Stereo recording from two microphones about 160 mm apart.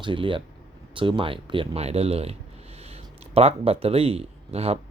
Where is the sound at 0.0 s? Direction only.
30° right (ahead or behind).